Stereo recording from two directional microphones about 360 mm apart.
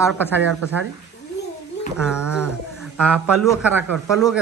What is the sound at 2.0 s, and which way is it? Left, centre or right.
Speech, centre.